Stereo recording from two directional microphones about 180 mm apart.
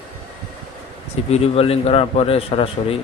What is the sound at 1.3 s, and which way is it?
A man's voice, 35° left (ahead or behind).